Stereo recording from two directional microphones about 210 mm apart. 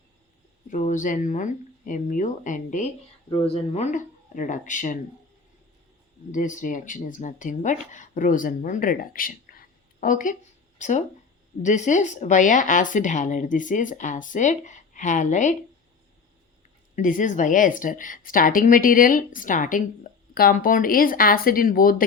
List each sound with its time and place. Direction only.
0.7 s speech: 40° left (ahead or behind)
6.3 s speech: 35° left (ahead or behind)
16.9 s speech: 40° left (ahead or behind)